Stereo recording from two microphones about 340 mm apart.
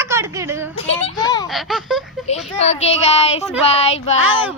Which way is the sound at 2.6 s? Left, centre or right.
Centre.